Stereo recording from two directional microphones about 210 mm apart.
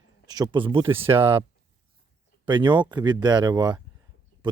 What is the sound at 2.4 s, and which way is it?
Speech, 20° right (ahead or behind).